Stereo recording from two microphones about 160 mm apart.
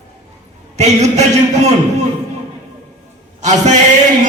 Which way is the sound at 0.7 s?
45° right (ahead or behind).